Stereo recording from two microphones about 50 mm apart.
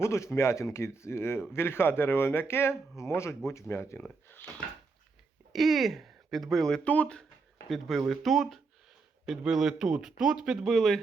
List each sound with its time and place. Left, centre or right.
0.0 s speech: left
4.3 s a sound: left
5.5 s speech: centre
6.8 s speech: left
7.7 s speech: centre
10.6 s speech: centre